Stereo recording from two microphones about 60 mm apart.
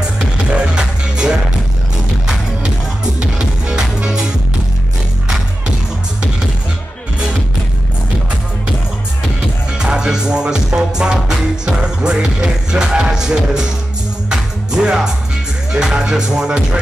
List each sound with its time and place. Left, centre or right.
0.2 s music: centre
3.2 s music: centre
9.8 s music: centre